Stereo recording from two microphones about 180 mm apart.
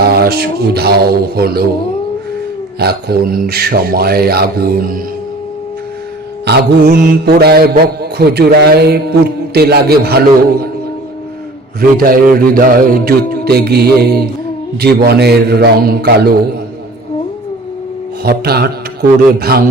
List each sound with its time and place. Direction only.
0.0 s speech: 60° right (ahead or behind)
1.4 s mantra: 60° right (ahead or behind)
2.7 s mantra: 60° right (ahead or behind)
6.4 s mantra: 65° right (ahead or behind)
11.8 s mantra: 55° right (ahead or behind)
18.2 s mantra: 60° right (ahead or behind)